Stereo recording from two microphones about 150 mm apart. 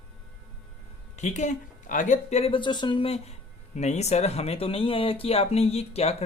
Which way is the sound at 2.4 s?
35° left (ahead or behind).